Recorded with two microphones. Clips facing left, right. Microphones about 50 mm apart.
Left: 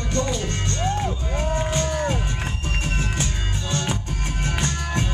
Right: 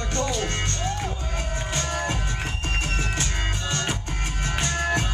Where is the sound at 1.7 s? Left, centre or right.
Right.